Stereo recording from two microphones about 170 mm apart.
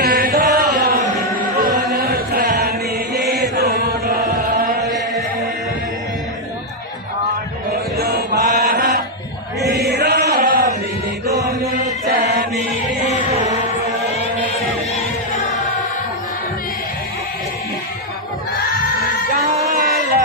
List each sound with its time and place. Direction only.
0.0 s chant: 55° right (ahead or behind)
7.7 s chant: 65° right (ahead or behind)
8.4 s mantra: 50° right (ahead or behind)
9.8 s chant: 65° right (ahead or behind)
11.3 s chant: 20° right (ahead or behind)
11.7 s chant: 55° right (ahead or behind)
18.5 s crowd: 60° left (ahead or behind)